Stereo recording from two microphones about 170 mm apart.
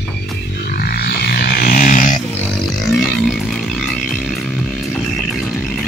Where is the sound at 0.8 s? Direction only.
65° left (ahead or behind); by 2.0 s 50° left (ahead or behind).